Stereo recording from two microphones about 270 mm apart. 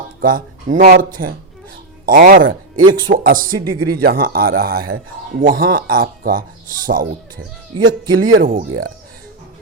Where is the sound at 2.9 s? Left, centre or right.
Right.